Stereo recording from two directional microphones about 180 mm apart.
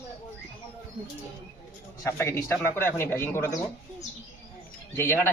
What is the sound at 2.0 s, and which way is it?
Speech, 15° left (ahead or behind).